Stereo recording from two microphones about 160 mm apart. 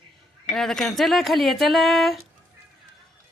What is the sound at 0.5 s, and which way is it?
Speech, 5° left (ahead or behind).